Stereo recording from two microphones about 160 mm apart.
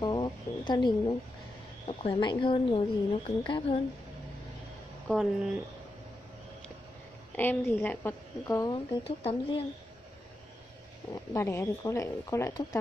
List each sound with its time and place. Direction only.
0.0 s a woman's voice: 25° left (ahead or behind)
5.0 s speech: 5° left (ahead or behind)
7.3 s a woman's voice: 10° left (ahead or behind)
8.7 s a woman's voice: 35° left (ahead or behind)
11.3 s a woman's voice: 15° left (ahead or behind)